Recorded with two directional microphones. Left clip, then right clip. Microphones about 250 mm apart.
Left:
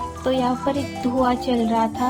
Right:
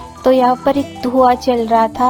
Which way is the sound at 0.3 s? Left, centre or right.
Right.